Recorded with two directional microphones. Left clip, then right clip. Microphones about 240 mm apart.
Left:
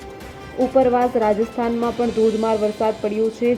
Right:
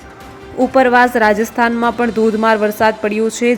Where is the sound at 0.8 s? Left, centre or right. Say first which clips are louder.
Right 6 dB; centre.